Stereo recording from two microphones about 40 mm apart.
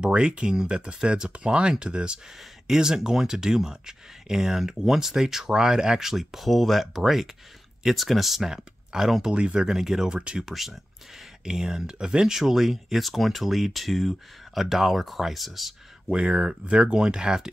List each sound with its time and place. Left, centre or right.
0.0 s speech: right; by 8.5 s centre
9.0 s speech: centre
9.3 s speech: right
9.7 s speech: centre
10.0 s speech: right
10.4 s speech: centre
11.4 s speech: centre
16.1 s speech: right